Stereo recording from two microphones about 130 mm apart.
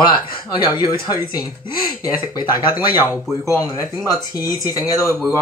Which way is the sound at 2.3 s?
35° left (ahead or behind).